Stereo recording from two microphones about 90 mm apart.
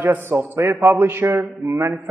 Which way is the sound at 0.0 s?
20° right (ahead or behind).